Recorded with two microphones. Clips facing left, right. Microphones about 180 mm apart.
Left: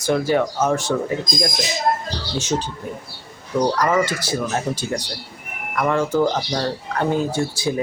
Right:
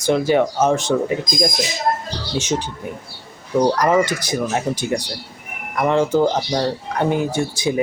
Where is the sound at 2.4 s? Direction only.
20° right (ahead or behind).